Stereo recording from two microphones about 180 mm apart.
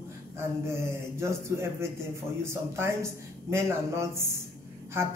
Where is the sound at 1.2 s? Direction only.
15° right (ahead or behind).